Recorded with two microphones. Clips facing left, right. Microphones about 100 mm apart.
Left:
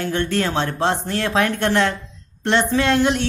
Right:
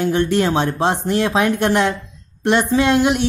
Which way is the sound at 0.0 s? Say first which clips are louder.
Right 5 dB; 15° right (ahead or behind).